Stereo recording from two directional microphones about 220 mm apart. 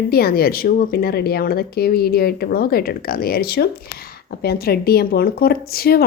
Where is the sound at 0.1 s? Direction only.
45° left (ahead or behind).